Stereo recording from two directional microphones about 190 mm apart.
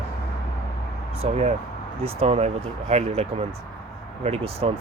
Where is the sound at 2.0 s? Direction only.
30° right (ahead or behind).